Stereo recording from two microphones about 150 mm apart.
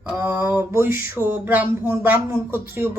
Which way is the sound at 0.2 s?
15° right (ahead or behind).